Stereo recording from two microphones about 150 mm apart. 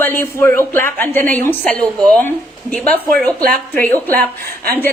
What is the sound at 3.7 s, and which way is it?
Speech, 10° left (ahead or behind).